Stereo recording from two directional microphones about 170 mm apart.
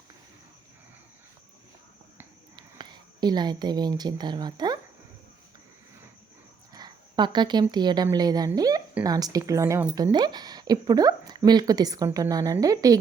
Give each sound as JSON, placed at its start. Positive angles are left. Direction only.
{"t": 2.6, "sound": "a woman's voice", "side_deg": -25}
{"t": 6.7, "sound": "a woman's voice", "side_deg": -25}